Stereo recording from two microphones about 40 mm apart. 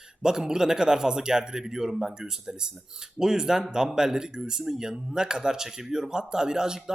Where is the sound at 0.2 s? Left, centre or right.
Centre.